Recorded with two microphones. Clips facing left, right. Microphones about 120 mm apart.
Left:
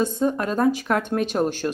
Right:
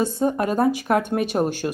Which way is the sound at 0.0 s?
15° right (ahead or behind).